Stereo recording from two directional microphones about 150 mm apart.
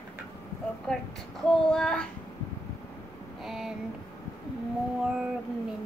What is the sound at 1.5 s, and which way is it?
Speech, 5° left (ahead or behind).